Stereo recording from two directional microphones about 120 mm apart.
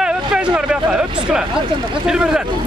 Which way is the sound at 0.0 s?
5° right (ahead or behind).